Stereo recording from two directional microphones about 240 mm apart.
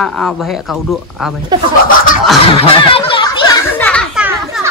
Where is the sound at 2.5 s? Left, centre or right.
Left.